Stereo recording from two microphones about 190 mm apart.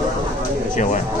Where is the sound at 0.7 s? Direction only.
40° left (ahead or behind).